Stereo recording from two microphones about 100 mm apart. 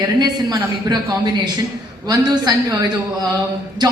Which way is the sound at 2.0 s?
40° right (ahead or behind).